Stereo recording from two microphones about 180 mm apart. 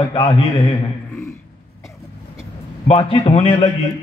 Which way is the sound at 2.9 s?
30° left (ahead or behind).